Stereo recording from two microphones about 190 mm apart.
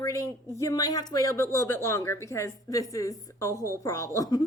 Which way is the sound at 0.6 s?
20° left (ahead or behind).